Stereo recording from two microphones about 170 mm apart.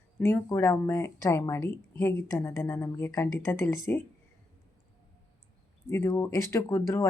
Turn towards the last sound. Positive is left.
turn(degrees=15)  # may be behind; listen again after turning